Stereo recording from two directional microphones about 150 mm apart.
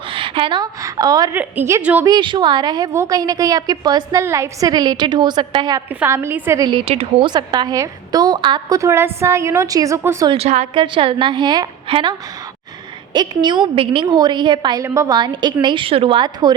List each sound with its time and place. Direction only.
0.1 s a woman's voice: 35° right (ahead or behind)
1.4 s a woman's voice: 15° right (ahead or behind)
2.0 s a woman's voice: 30° right (ahead or behind)
5.9 s a woman's voice: 15° right (ahead or behind)
6.6 s a woman's voice: 30° right (ahead or behind)
10.2 s a woman's voice: 45° right (ahead or behind)
10.8 s a woman's voice: 35° right (ahead or behind)
13.1 s a woman's voice: 30° right (ahead or behind)